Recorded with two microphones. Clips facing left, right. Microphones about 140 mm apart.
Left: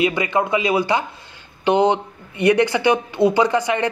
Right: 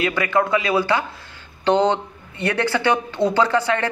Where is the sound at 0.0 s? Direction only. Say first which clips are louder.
Left 1 dB; 20° left (ahead or behind).